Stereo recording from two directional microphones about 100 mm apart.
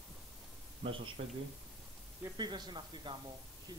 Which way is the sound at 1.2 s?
80° right.